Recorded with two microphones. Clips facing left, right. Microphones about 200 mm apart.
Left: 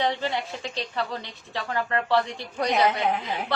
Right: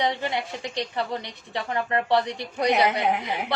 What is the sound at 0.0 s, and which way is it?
A woman's voice, 15° right (ahead or behind).